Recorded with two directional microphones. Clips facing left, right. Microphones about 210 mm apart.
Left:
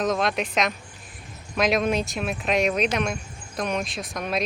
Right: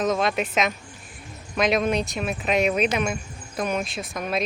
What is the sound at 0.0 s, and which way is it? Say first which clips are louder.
Speech: right 1 dB; centre (ahead or behind).